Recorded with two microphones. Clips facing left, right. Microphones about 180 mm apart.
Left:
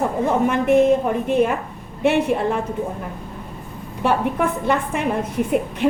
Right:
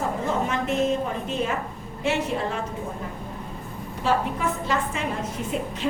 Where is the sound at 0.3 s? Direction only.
55° left (ahead or behind).